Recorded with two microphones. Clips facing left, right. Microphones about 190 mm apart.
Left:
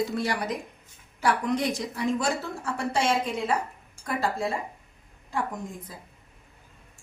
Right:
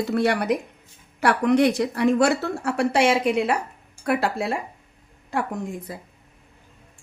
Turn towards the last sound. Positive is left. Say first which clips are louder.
# right 5 dB
turn(degrees=-70)  # may be behind; listen again after turning